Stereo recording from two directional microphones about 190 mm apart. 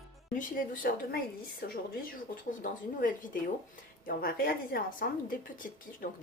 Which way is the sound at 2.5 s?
45° left (ahead or behind).